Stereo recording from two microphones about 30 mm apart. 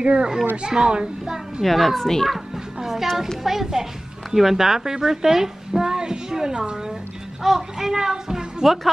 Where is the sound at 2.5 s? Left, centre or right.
Centre.